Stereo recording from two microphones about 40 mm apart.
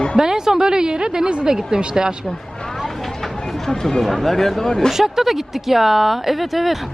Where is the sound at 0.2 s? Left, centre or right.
Centre.